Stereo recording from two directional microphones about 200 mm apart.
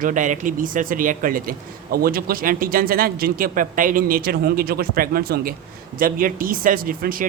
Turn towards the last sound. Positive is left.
turn(degrees=-45)  # may be behind; listen again after turning